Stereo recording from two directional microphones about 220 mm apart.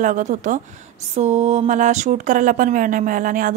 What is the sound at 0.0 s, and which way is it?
Speech, 35° right (ahead or behind).